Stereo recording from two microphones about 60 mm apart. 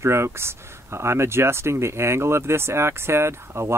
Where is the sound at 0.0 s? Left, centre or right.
Right.